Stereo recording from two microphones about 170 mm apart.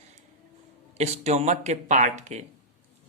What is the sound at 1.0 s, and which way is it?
Speech, 40° right (ahead or behind).